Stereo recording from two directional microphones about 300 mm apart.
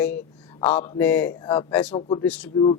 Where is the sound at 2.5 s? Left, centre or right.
Centre.